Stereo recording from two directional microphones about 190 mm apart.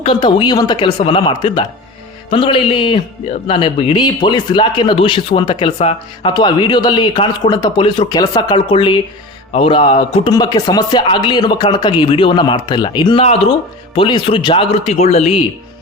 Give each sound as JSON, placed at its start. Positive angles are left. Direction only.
{"t": 0.0, "sound": "speech", "side_deg": 25}